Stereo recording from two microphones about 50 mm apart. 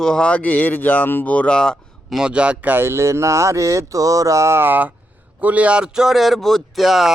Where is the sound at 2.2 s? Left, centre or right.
Centre.